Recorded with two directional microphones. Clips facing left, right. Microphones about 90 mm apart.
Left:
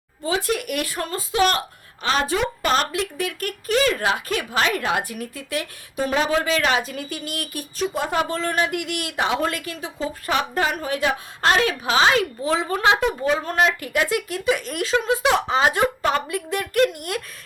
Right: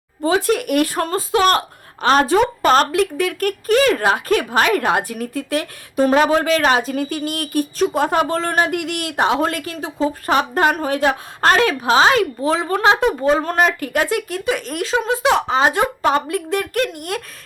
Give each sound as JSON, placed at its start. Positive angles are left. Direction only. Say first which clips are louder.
{"t": 0.2, "sound": "speech", "louder": "right 6 dB", "side_deg": -45}
{"t": 16.3, "sound": "speech", "louder": "right 3 dB", "side_deg": -40}